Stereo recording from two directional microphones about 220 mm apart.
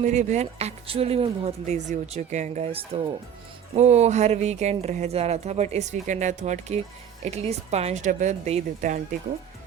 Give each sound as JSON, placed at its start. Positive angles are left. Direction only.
{"t": 0.0, "sound": "speech", "side_deg": -30}
{"t": 3.8, "sound": "speech", "side_deg": -30}